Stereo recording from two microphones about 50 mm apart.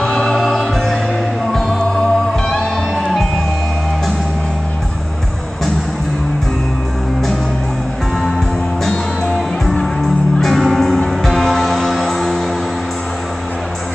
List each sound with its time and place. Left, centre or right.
0.0 s music: centre
10.4 s music: centre